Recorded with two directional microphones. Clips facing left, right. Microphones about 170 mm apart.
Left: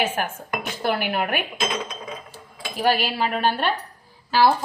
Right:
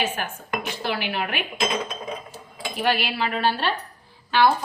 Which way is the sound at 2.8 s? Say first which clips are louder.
Left 3 dB; 40° left (ahead or behind).